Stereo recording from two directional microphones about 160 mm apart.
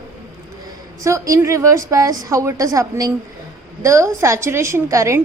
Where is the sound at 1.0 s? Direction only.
20° right (ahead or behind).